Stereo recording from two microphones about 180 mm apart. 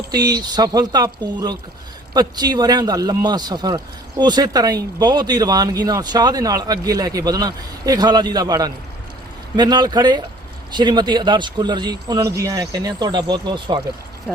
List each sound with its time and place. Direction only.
0.3 s speech: 20° right (ahead or behind)